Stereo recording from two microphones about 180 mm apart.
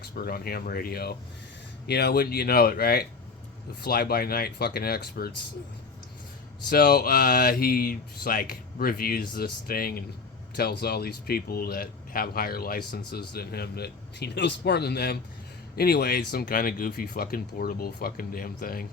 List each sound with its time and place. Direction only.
0.0 s speech: 55° left (ahead or behind)
6.7 s speech: 60° left (ahead or behind)